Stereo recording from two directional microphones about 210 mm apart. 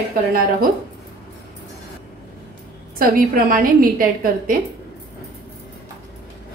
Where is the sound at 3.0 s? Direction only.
45° right (ahead or behind).